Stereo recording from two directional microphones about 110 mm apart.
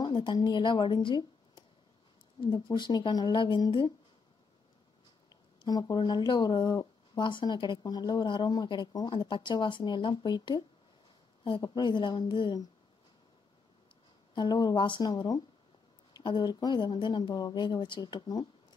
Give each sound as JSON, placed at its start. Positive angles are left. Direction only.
{"t": 0.0, "sound": "a woman's voice", "side_deg": 45}
{"t": 5.3, "sound": "speech", "side_deg": 35}
{"t": 11.6, "sound": "speech", "side_deg": 45}
{"t": 14.3, "sound": "speech", "side_deg": 40}